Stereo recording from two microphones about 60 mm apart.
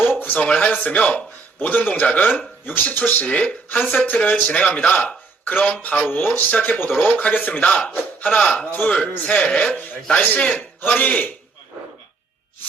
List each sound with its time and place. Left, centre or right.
0.0 s a sound: left
0.8 s speech: centre
7.0 s speech: centre
9.0 s speech: left
9.5 s a man's voice: centre
9.7 s speech: left